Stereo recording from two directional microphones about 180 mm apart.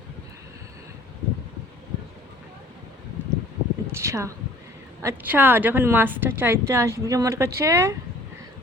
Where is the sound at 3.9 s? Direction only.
15° right (ahead or behind).